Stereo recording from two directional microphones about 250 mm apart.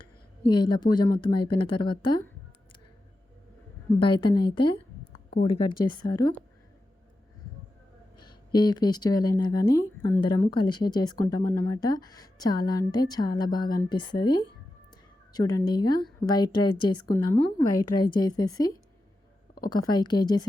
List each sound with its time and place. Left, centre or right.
0.4 s speech: centre
4.0 s a woman's voice: centre
8.2 s speech: centre
19.9 s speech: centre